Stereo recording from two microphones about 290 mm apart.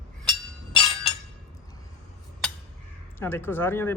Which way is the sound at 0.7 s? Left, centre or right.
Centre.